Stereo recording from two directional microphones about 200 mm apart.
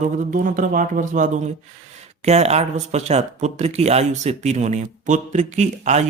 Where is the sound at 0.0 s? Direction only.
40° right (ahead or behind).